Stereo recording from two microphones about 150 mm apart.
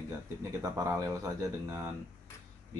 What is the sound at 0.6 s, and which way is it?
A man's voice, 20° right (ahead or behind).